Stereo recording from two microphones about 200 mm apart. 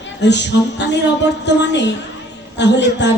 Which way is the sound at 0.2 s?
60° left (ahead or behind).